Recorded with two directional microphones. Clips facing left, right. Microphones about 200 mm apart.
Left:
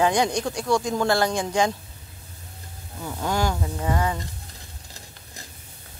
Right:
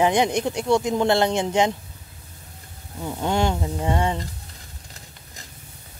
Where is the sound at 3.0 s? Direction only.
20° right (ahead or behind).